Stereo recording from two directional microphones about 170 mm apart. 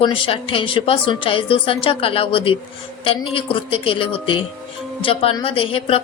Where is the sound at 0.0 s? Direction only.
30° left (ahead or behind).